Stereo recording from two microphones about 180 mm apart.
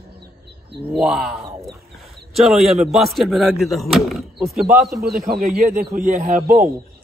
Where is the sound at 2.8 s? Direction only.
Centre (ahead or behind).